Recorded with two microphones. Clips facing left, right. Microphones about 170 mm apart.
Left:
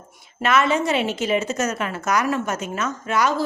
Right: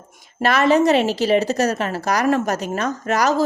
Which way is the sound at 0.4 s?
35° right (ahead or behind).